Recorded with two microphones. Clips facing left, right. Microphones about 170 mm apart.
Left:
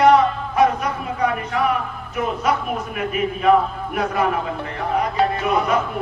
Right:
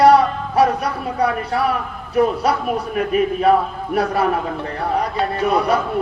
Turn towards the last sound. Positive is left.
turn(degrees=-35)  # may be behind; listen again after turning